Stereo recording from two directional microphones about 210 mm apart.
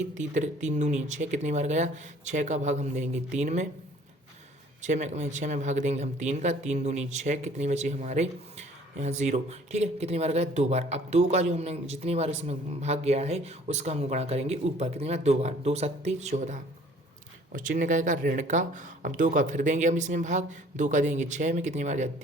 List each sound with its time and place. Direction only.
0.1 s speech: 35° right (ahead or behind)
4.8 s speech: 35° right (ahead or behind)